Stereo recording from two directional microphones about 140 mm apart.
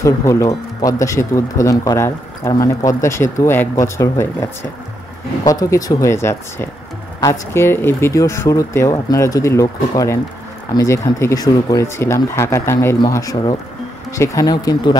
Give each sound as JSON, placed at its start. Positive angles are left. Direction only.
{"t": 0.0, "sound": "speech", "side_deg": 20}